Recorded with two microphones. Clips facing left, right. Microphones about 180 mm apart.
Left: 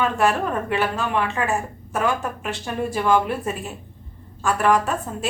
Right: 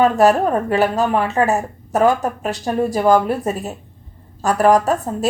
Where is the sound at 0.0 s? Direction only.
40° right (ahead or behind).